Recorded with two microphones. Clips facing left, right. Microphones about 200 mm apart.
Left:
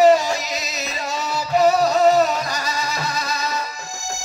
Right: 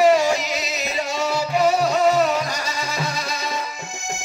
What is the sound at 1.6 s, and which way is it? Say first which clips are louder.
Music: left 3 dB; 40° left (ahead or behind).